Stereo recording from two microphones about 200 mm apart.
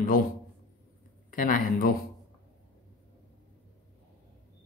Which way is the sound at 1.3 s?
45° left (ahead or behind).